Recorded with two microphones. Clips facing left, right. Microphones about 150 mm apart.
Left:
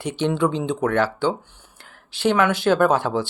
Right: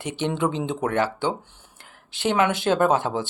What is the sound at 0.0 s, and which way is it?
Speech, 20° right (ahead or behind).